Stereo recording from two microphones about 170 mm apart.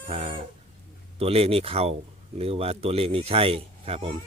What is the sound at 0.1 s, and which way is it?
Chicken, 35° right (ahead or behind).